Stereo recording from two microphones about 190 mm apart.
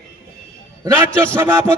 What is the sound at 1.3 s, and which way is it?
Speech, 15° right (ahead or behind).